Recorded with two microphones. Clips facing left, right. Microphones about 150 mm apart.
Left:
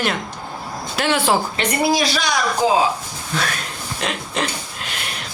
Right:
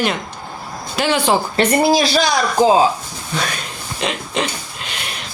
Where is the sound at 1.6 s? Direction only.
30° right (ahead or behind).